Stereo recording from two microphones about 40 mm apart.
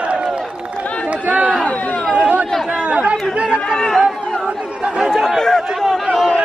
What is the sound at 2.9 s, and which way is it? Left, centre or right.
Chatter, right.